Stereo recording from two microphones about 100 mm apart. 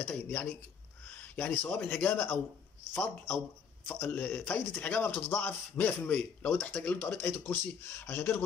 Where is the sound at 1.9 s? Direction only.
15° left (ahead or behind).